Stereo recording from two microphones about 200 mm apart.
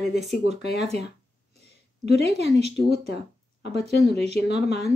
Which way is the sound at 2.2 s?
30° right (ahead or behind).